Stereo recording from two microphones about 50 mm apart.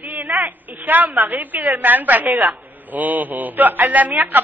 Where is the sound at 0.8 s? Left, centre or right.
Right.